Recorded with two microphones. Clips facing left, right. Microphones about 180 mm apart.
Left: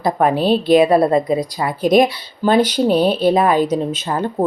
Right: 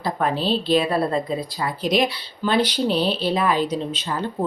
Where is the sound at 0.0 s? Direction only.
50° left (ahead or behind).